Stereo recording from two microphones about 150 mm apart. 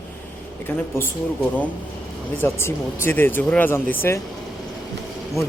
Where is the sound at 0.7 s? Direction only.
15° left (ahead or behind).